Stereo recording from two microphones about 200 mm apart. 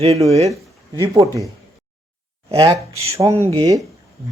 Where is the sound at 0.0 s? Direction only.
30° right (ahead or behind).